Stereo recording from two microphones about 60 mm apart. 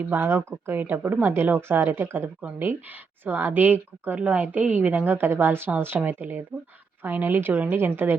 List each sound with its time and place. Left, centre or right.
0.1 s a woman's voice: right